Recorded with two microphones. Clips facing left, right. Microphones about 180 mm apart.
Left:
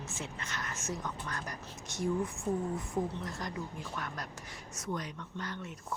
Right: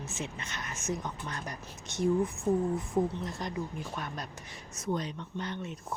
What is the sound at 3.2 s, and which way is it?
Speech, 25° right (ahead or behind).